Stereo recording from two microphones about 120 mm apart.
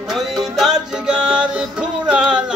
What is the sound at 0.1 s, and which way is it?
Music, centre (ahead or behind).